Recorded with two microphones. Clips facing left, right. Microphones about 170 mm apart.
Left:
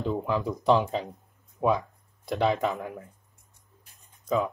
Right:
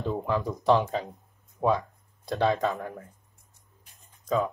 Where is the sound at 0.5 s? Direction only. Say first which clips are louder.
Even; 15° left (ahead or behind).